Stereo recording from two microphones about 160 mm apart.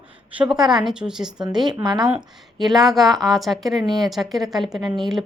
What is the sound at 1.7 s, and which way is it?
Speech, 25° right (ahead or behind).